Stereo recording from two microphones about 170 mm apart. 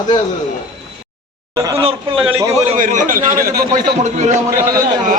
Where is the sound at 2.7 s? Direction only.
50° right (ahead or behind).